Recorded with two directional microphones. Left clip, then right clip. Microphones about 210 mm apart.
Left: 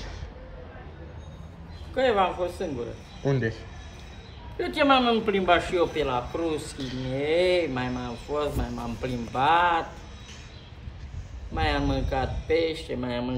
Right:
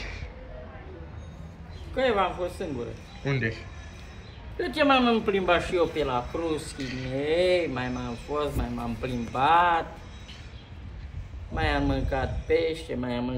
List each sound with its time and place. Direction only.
2.0 s speech: 5° left (ahead or behind)
11.5 s speech: 5° left (ahead or behind)